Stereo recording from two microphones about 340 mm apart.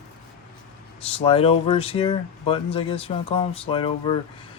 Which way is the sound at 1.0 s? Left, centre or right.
Centre.